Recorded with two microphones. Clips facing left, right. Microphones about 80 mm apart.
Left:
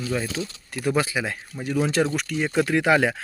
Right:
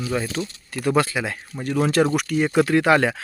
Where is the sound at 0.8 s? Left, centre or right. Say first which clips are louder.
Right 3 dB; centre.